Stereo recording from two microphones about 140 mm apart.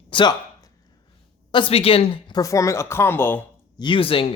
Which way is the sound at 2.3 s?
25° left (ahead or behind).